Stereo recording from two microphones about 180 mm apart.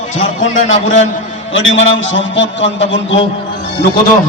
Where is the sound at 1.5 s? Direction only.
90° left.